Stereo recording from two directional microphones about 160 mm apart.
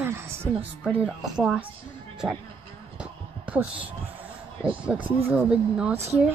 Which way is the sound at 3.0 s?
10° right (ahead or behind).